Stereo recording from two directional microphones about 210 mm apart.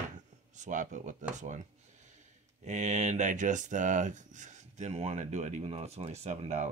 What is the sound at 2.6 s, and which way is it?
Speech, 35° right (ahead or behind).